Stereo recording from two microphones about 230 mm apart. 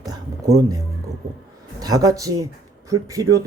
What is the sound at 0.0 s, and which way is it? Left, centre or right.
Music, centre.